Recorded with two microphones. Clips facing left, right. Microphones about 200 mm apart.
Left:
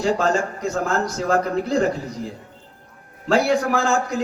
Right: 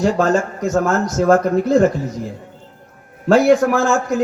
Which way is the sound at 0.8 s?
55° right (ahead or behind).